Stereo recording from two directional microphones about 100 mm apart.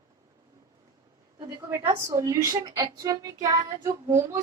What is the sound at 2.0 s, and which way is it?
A woman's voice, 30° right (ahead or behind).